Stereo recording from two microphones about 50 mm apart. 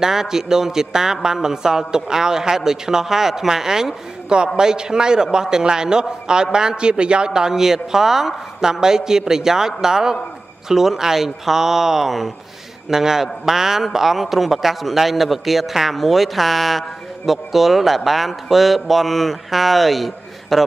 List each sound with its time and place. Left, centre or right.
0.0 s a man's voice: centre